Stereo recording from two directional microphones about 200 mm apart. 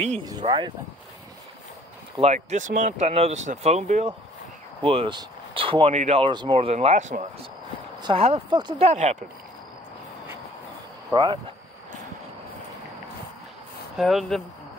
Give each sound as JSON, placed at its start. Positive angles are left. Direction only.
{"t": 0.2, "sound": "speech", "side_deg": -20}
{"t": 2.1, "sound": "speech", "side_deg": -35}
{"t": 11.1, "sound": "speech", "side_deg": -15}
{"t": 13.9, "sound": "speech", "side_deg": 0}